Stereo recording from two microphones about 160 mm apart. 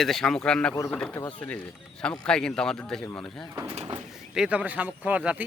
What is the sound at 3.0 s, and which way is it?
Speech, 15° left (ahead or behind).